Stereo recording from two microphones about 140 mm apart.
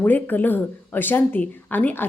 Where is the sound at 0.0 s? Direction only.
10° left (ahead or behind).